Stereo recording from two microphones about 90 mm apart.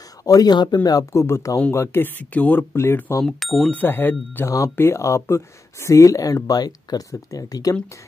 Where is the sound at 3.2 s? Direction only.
5° left (ahead or behind).